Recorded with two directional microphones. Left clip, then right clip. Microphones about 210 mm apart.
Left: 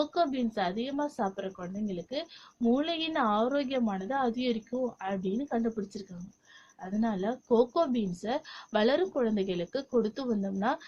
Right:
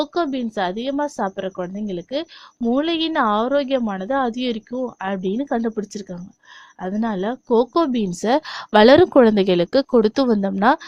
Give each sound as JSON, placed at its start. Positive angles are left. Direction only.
{"t": 0.0, "sound": "a woman's voice", "side_deg": -45}